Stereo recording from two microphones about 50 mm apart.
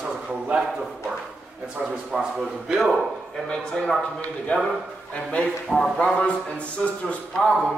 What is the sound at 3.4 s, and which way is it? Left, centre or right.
Speech, centre.